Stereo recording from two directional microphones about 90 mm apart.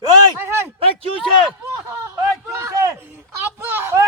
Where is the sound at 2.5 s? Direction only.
35° right (ahead or behind).